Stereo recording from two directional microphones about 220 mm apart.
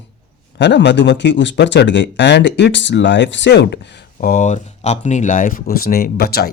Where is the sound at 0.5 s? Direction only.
50° left (ahead or behind).